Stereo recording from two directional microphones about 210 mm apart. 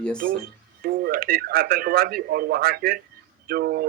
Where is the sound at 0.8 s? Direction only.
45° right (ahead or behind).